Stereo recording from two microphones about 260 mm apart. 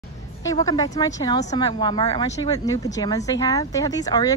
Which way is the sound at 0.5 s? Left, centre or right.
Centre.